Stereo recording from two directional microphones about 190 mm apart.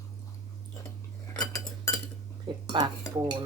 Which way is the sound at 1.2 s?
20° left (ahead or behind).